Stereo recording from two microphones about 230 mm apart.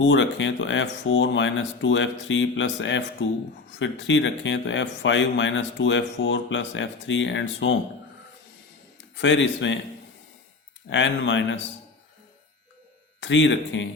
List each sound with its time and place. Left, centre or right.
0.0 s speech: left
9.1 s speech: left
10.8 s speech: left
13.1 s speech: left